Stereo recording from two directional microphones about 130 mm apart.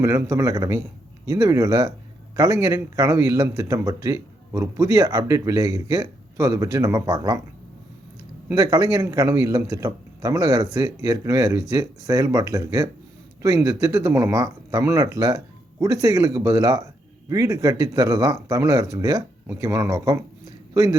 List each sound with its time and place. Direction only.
0.0 s a man's voice: 20° right (ahead or behind)
8.4 s a man's voice: 25° right (ahead or behind)